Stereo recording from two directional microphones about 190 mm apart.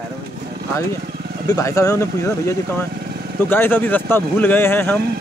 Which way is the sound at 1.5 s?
15° left (ahead or behind).